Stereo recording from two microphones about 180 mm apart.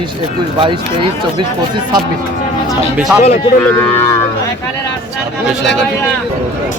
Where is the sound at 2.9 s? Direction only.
5° right (ahead or behind).